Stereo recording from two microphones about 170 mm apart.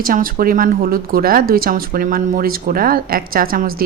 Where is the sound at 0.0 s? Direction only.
55° right (ahead or behind).